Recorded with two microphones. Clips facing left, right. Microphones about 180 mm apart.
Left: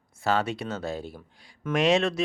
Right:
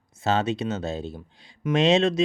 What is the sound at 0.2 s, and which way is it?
Speech, 20° right (ahead or behind).